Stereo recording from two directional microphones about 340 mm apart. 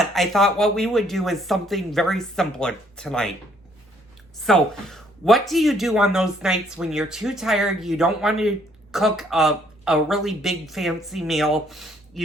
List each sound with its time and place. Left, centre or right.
0.0 s speech: centre
4.4 s speech: centre